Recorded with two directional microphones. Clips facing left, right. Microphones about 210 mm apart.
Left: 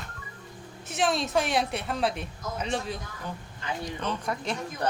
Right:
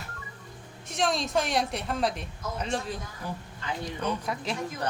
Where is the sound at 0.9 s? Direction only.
Centre (ahead or behind).